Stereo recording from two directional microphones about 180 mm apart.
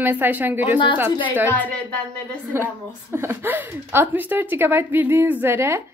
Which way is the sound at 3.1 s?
10° right (ahead or behind).